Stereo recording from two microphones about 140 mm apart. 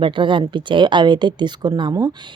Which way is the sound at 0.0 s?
35° right (ahead or behind).